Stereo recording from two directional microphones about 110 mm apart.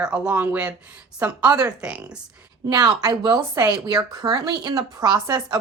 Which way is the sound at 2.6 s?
40° right (ahead or behind).